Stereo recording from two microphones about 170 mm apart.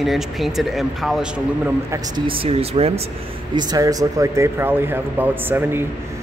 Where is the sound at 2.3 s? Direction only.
35° right (ahead or behind).